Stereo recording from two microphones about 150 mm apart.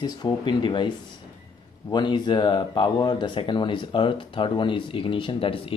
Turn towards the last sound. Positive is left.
turn(degrees=35)  # may be behind; listen again after turning